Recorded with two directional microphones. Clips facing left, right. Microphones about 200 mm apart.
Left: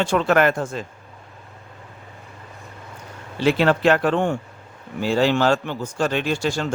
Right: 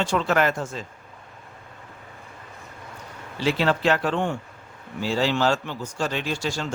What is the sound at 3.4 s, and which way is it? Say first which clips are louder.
Speech: left 5 dB; 55° left (ahead or behind).